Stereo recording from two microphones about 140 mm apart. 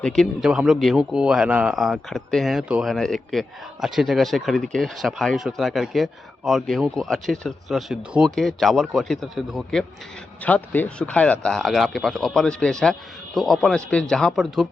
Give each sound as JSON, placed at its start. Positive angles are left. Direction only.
{"t": 0.0, "sound": "a man's voice", "side_deg": 0}
{"t": 10.4, "sound": "a man's voice", "side_deg": 10}